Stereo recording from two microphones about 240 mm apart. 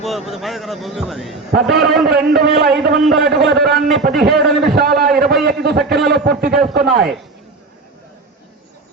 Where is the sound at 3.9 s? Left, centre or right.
Centre.